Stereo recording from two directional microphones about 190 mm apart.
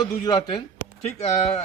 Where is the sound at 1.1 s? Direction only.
35° left (ahead or behind).